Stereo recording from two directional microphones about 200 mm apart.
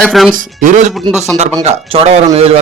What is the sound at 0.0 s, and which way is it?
Speech, centre (ahead or behind).